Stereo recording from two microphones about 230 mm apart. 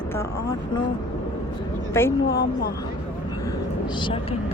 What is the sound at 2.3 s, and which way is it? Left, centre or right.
Speech, left.